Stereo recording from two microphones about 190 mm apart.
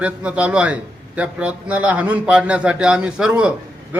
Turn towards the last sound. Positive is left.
turn(degrees=-5)  # may be behind; listen again after turning